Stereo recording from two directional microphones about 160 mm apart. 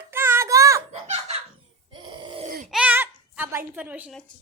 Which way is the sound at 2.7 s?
10° right (ahead or behind).